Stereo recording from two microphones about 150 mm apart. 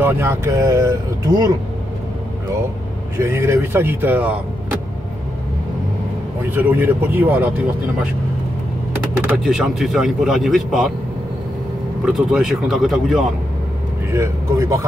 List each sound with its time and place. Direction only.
0.0 s speech: 20° right (ahead or behind)
3.2 s speech: 20° right (ahead or behind)
6.5 s speech: 15° right (ahead or behind)
9.2 s speech: 5° right (ahead or behind)
12.1 s speech: 5° right (ahead or behind)
14.1 s speech: 20° right (ahead or behind)